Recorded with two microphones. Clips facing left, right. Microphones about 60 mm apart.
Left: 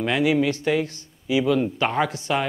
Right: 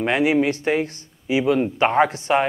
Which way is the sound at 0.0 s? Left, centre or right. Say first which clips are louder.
Right 2 dB; right.